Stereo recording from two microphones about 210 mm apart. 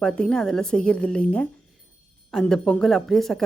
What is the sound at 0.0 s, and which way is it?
Speech, 5° left (ahead or behind).